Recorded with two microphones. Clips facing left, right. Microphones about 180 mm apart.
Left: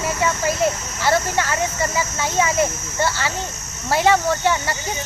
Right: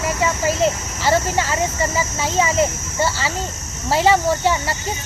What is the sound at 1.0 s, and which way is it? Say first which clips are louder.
Speech: right 1 dB; 10° right (ahead or behind).